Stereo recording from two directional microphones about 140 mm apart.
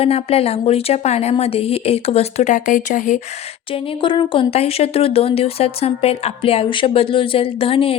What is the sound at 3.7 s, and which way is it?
Speech, 40° left (ahead or behind).